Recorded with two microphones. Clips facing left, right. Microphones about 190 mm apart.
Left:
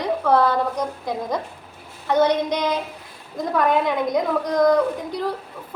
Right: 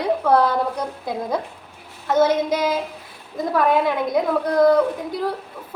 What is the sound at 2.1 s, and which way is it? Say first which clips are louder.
A woman's voice: right 1 dB; 5° right (ahead or behind).